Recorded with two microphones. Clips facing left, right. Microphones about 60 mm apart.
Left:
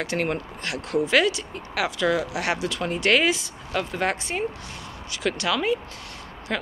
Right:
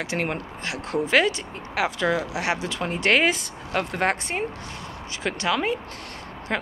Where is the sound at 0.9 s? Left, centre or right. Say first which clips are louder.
Even; right.